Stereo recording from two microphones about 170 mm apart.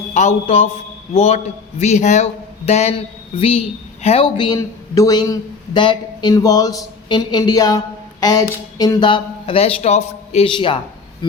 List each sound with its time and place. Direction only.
0.1 s a man's voice: 45° left (ahead or behind)